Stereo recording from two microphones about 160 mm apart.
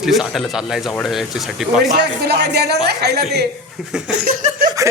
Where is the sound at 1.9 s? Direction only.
90° right.